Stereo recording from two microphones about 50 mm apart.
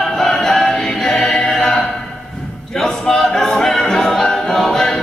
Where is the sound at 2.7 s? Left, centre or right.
Centre.